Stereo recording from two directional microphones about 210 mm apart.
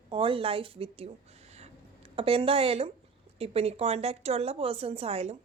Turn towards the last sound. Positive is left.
turn(degrees=-30)  # may be behind; listen again after turning